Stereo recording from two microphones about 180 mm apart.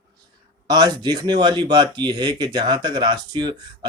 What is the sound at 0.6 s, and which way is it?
Speech, 20° right (ahead or behind).